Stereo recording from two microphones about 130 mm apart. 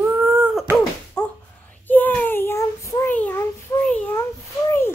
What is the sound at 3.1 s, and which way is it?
Speech, 10° left (ahead or behind).